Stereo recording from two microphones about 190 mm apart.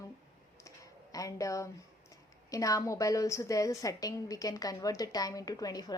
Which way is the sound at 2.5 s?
20° left (ahead or behind).